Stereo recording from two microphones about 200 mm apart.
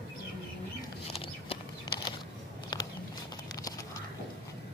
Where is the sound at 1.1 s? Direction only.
25° left (ahead or behind).